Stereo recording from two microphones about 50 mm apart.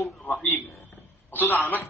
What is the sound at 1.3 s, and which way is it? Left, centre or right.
Speech, left.